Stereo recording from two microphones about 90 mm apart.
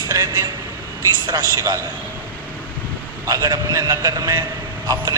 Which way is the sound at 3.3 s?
45° right (ahead or behind).